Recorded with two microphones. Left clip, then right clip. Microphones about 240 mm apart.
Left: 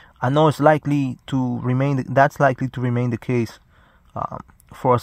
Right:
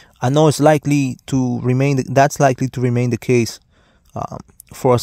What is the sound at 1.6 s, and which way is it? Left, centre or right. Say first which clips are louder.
Speech: right 5 dB; right.